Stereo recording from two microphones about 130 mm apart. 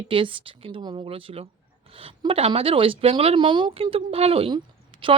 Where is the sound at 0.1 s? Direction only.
40° right (ahead or behind).